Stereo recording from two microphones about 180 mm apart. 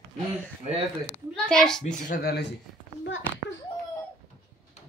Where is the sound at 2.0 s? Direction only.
60° left (ahead or behind).